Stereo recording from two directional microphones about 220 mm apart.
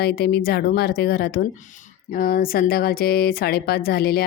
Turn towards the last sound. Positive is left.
turn(degrees=45)  # may be behind; listen again after turning